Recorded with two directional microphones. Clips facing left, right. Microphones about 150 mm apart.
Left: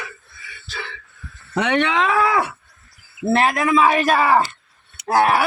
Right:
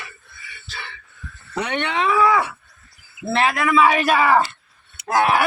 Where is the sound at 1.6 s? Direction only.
90° left.